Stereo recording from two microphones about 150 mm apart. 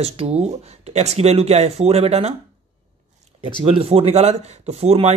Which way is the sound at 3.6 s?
40° right (ahead or behind).